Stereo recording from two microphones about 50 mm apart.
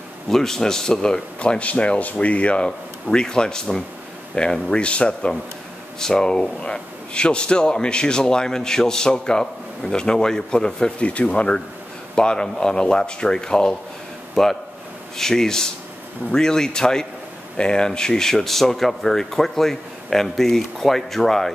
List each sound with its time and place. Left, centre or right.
0.3 s a man's voice: centre
1.4 s a man's voice: left
5.9 s a man's voice: centre